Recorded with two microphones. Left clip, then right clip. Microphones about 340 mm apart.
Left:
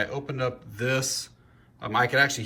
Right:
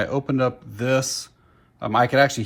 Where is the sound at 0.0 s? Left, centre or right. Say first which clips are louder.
Right 6 dB; centre.